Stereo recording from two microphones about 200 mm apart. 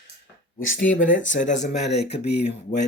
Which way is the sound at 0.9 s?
40° left (ahead or behind).